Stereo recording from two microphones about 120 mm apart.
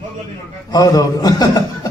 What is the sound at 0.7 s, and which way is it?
Speech, 30° left (ahead or behind).